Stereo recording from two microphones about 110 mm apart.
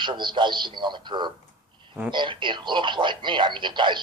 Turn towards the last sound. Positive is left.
turn(degrees=-45)  # may be behind; listen again after turning